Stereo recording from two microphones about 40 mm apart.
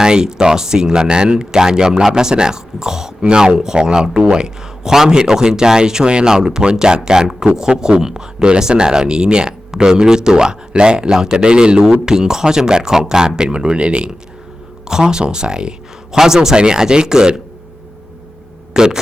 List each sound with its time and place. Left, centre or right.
0.0 s speech: centre
14.8 s speech: centre
18.7 s speech: centre